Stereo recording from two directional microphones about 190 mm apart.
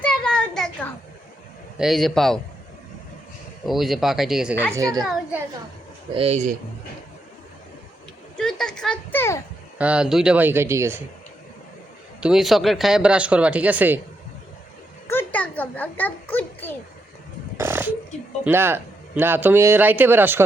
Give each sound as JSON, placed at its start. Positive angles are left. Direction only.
{"t": 0.0, "sound": "a sound", "side_deg": 5}
{"t": 1.8, "sound": "speech", "side_deg": 0}
{"t": 3.7, "sound": "speech", "side_deg": 0}
{"t": 4.7, "sound": "a woman's voice", "side_deg": -20}
{"t": 6.1, "sound": "speech", "side_deg": -35}
{"t": 8.4, "sound": "speech", "side_deg": 5}
{"t": 9.7, "sound": "speech", "side_deg": -5}
{"t": 12.2, "sound": "speech", "side_deg": 0}
{"t": 15.0, "sound": "a child's voice", "side_deg": 10}
{"t": 17.6, "sound": "speech", "side_deg": -10}